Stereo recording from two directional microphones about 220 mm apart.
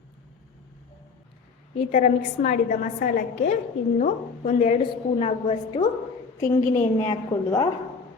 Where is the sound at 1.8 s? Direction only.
35° left (ahead or behind).